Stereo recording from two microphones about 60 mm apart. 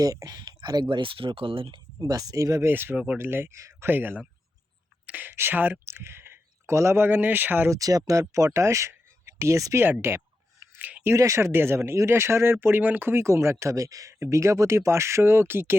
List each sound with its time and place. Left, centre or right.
0.0 s speech: right
2.0 s speech: right
2.6 s speech: right
3.6 s a sound: right
3.8 s speech: right
5.0 s a sound: right
5.4 s speech: right
5.8 s speech: right
7.7 s speech: right
8.6 s speech: right
9.8 s speech: right
10.8 s a sound: right
11.1 s speech: right
13.2 s speech: right